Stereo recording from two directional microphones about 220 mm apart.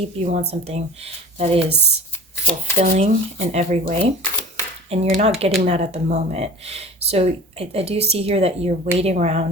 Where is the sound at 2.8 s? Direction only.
30° right (ahead or behind).